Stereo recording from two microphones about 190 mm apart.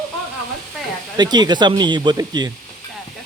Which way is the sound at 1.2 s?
20° right (ahead or behind).